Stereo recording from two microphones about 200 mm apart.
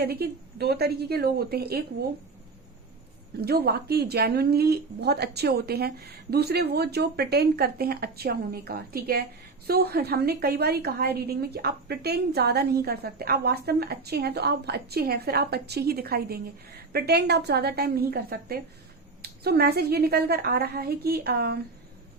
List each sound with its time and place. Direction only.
0.0 s a woman's voice: 50° right (ahead or behind)
3.4 s a woman's voice: 50° right (ahead or behind)